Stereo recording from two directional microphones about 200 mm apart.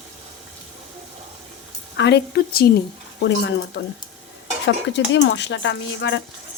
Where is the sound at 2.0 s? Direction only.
55° left (ahead or behind).